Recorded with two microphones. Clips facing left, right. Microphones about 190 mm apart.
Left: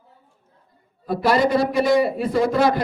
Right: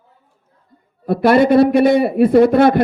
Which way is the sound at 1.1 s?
60° right (ahead or behind).